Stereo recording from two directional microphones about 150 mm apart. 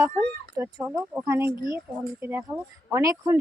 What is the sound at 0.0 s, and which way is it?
Speech, 15° right (ahead or behind).